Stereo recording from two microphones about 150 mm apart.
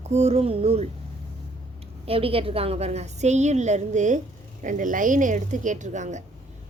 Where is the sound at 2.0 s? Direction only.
40° right (ahead or behind).